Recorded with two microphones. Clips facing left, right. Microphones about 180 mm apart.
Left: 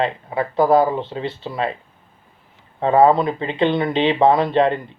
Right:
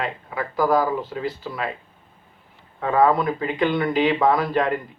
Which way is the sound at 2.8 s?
30° left (ahead or behind).